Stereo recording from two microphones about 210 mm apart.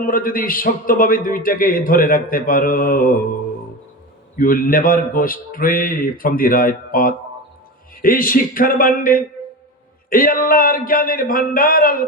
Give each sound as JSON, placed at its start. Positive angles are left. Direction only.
{"t": 0.0, "sound": "a man's voice", "side_deg": 40}
{"t": 4.4, "sound": "a man's voice", "side_deg": 45}